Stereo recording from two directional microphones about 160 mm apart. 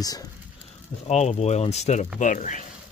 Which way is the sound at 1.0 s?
40° left (ahead or behind).